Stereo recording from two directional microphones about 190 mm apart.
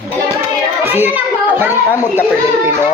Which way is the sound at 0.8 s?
10° right (ahead or behind).